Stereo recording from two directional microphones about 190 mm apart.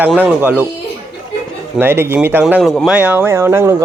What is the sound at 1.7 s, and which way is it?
Speech, 10° right (ahead or behind).